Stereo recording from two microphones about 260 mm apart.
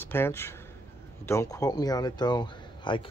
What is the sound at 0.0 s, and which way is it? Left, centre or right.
Speech, centre.